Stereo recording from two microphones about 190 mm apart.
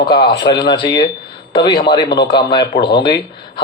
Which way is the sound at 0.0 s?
25° left (ahead or behind).